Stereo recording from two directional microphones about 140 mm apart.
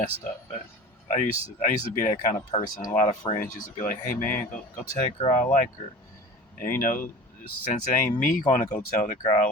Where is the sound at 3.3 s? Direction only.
75° left (ahead or behind).